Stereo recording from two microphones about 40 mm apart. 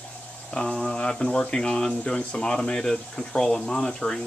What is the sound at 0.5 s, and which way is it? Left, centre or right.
Speech, centre.